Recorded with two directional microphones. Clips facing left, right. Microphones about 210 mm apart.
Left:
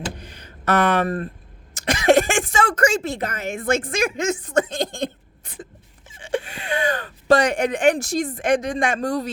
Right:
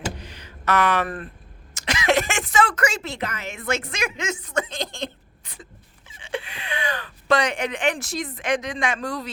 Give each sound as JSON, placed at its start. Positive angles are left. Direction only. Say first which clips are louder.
{"t": 0.3, "sound": "a sound", "louder": "left 4 dB", "side_deg": 50}
{"t": 1.7, "sound": "speech", "louder": "left 6 dB", "side_deg": 50}
{"t": 6.1, "sound": "speech", "louder": "left 5 dB", "side_deg": 45}